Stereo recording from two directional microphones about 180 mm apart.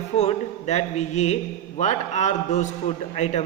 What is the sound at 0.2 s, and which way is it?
A man's voice, 40° left (ahead or behind).